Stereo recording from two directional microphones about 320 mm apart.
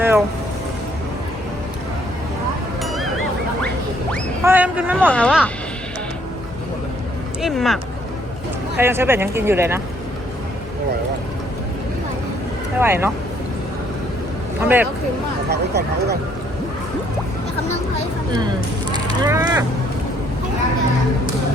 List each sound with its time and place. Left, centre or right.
0.0 s speech: centre
2.8 s a sound: centre
4.4 s speech: centre
7.4 s speech: centre
8.8 s speech: centre
12.8 s speech: centre
14.6 s speech: centre
15.4 s speech: right
19.2 s speech: centre